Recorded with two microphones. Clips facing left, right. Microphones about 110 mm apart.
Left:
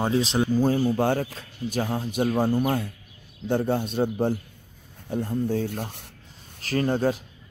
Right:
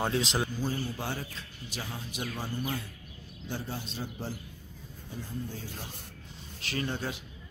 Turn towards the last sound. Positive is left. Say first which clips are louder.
# left 11 dB
turn(degrees=45)  # may be behind; listen again after turning